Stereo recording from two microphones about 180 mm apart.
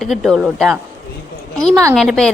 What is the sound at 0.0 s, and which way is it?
A woman's voice, centre (ahead or behind).